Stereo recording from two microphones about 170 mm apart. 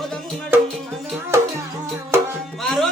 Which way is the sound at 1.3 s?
15° right (ahead or behind).